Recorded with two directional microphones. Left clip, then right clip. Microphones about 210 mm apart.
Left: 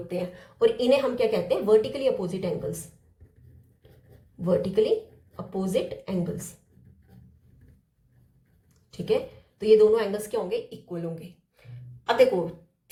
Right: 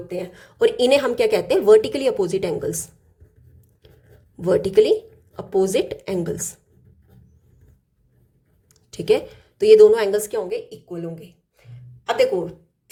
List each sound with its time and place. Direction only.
0.1 s a woman's voice: 25° right (ahead or behind)
0.4 s a woman's voice: 45° right (ahead or behind)
4.4 s a woman's voice: 45° right (ahead or behind)
8.9 s a woman's voice: 45° right (ahead or behind)
10.5 s a woman's voice: 20° right (ahead or behind)